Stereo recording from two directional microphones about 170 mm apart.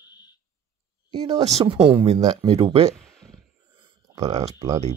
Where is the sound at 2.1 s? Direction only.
25° right (ahead or behind).